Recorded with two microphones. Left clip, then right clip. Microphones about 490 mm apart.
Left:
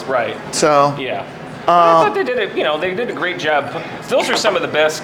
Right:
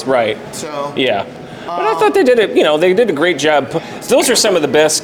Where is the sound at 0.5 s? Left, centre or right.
Left.